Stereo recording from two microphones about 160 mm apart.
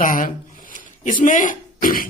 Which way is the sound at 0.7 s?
55° left (ahead or behind).